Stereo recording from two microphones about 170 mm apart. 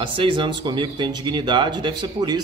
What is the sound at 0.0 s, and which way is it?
Speech, 30° right (ahead or behind).